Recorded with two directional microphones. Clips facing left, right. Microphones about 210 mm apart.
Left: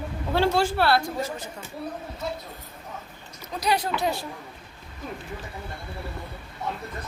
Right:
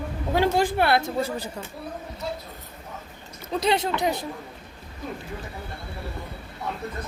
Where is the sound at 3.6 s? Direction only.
25° right (ahead or behind).